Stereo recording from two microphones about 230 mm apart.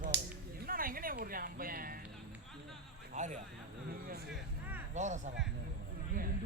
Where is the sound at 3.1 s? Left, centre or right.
Right.